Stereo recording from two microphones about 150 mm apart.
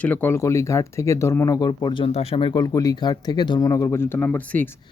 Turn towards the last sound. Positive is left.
turn(degrees=10)  # may be behind; listen again after turning